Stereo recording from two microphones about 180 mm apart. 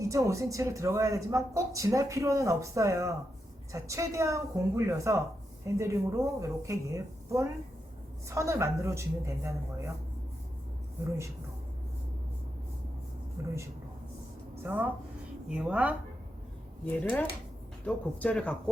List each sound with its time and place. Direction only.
0.0 s speech: 15° right (ahead or behind)
13.4 s speech: 15° right (ahead or behind)
14.6 s speech: 10° right (ahead or behind)
16.8 s a man's voice: 10° left (ahead or behind)